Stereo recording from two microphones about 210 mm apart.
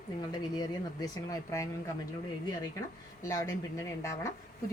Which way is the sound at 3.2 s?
15° left (ahead or behind).